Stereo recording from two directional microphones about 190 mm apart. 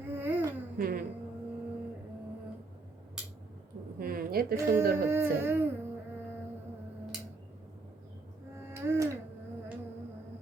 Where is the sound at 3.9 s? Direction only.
50° right (ahead or behind).